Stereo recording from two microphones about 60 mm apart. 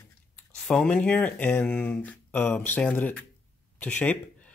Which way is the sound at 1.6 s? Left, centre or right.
Centre.